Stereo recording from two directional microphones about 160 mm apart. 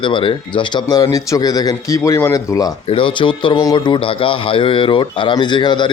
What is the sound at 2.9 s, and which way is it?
Speech, 35° left (ahead or behind).